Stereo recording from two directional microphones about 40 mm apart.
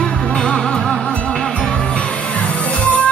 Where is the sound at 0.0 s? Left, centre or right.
Centre.